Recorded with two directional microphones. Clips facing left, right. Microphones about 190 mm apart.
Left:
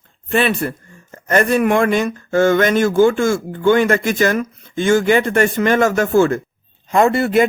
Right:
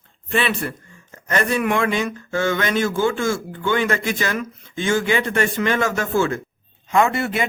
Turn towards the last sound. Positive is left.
turn(degrees=40)  # may be behind; listen again after turning